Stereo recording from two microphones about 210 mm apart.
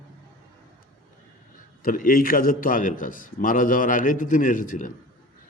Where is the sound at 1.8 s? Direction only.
40° left (ahead or behind).